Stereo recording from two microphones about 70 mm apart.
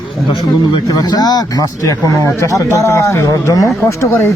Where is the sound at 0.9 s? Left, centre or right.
Left.